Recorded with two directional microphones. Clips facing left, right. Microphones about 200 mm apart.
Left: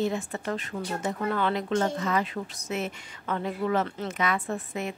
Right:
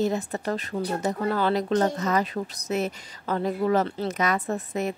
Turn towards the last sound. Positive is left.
turn(degrees=-40)  # may be behind; listen again after turning